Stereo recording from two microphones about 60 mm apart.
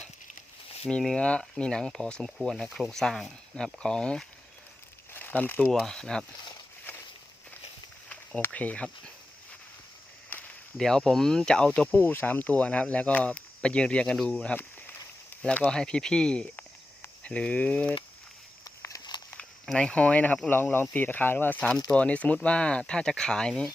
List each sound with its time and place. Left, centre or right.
0.9 s speech: centre
2.6 s speech: centre
2.9 s speech: centre
5.1 s crumpling: left
5.7 s speech: centre
8.4 s speech: left
10.3 s a sound: left
10.8 s speech: centre
18.6 s walk: left
19.6 s speech: centre
20.5 s speech: left
21.6 s speech: centre